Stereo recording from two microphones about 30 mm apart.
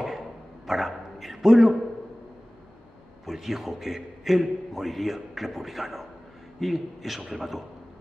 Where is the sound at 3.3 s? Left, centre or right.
Centre.